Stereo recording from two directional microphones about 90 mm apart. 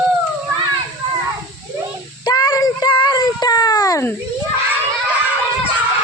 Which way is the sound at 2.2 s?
50° left (ahead or behind).